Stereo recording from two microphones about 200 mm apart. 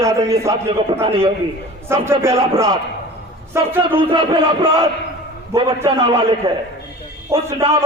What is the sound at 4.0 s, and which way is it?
A man's voice, 25° right (ahead or behind).